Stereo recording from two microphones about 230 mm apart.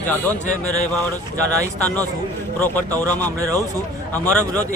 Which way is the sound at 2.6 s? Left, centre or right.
Centre.